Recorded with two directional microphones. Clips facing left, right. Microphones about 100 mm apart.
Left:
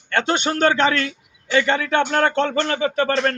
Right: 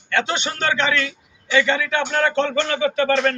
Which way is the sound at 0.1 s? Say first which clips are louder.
Left 2 dB; 45° left (ahead or behind).